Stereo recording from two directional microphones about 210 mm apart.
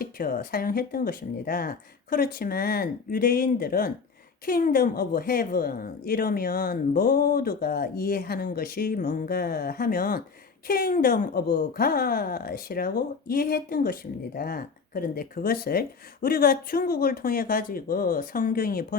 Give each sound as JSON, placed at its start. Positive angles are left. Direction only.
{"t": 0.0, "sound": "a woman's voice", "side_deg": 45}